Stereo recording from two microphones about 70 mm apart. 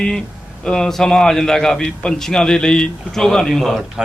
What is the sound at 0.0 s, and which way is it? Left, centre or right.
A man's voice, centre.